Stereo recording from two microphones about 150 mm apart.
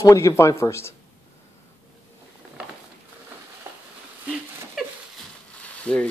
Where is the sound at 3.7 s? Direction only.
15° right (ahead or behind).